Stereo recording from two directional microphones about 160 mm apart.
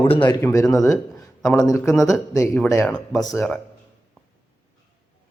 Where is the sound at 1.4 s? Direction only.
5° left (ahead or behind).